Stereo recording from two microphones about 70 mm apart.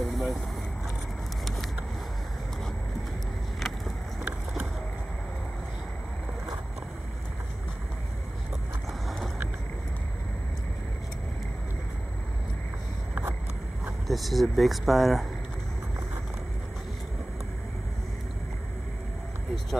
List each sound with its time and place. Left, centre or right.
0.0 s vehicle: centre
3.5 s vehicle: centre
4.2 s vehicle: centre
14.0 s speech: centre